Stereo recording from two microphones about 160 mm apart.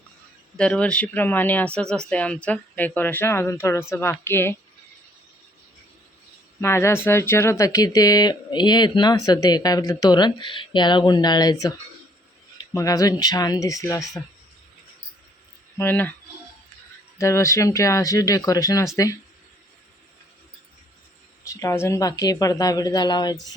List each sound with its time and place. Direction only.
0.5 s speech: 5° left (ahead or behind)
6.6 s speech: 15° left (ahead or behind)
15.8 s speech: 10° left (ahead or behind)
17.2 s speech: 20° left (ahead or behind)
21.4 s speech: 20° left (ahead or behind)